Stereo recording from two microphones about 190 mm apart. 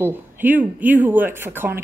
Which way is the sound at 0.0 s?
10° right (ahead or behind).